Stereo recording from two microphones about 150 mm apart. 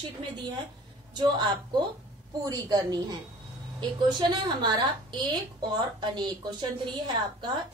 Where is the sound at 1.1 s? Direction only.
30° right (ahead or behind).